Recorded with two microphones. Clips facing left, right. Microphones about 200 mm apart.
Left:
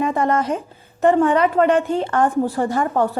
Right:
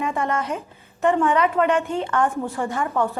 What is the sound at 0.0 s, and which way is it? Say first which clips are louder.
A woman's voice: left 5 dB; 35° left (ahead or behind).